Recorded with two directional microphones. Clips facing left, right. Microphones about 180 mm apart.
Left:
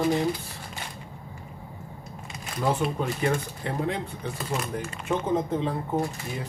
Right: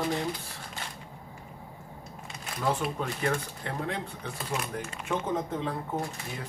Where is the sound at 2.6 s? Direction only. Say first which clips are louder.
Left 4 dB; 20° left (ahead or behind).